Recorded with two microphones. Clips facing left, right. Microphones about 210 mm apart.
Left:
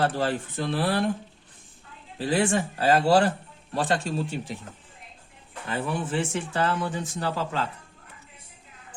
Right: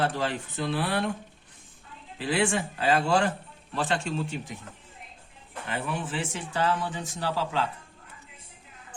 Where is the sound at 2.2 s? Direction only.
40° left (ahead or behind).